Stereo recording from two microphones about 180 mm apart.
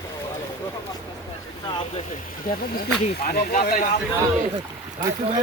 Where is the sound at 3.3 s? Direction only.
55° left (ahead or behind).